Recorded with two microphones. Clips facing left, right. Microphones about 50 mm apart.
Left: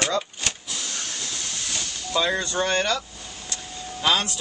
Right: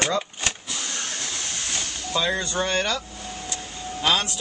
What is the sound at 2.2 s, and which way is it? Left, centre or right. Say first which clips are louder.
Speech: left 1 dB; centre.